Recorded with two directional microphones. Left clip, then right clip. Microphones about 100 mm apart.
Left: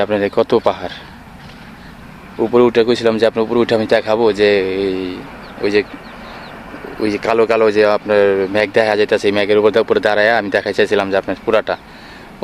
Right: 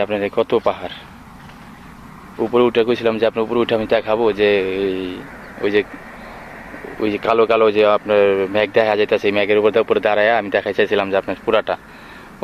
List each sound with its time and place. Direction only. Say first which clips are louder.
0.0 s speech: left 4 dB; 55° left (ahead or behind)
2.5 s speech: left 3 dB; 35° left (ahead or behind); by 5.9 s 15° left (ahead or behind)
7.1 s speech: left 1 dB; 15° left (ahead or behind)